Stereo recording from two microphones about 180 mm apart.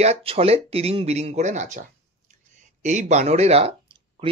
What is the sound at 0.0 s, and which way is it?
Speech, 35° right (ahead or behind).